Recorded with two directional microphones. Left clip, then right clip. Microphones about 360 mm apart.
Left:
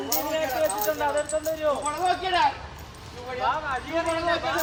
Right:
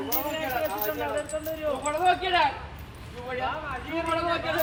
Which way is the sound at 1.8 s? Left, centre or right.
Centre.